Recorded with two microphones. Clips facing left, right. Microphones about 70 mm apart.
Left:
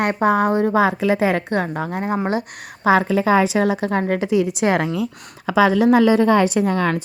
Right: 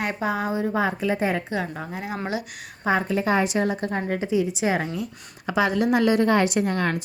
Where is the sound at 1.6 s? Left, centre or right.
Left.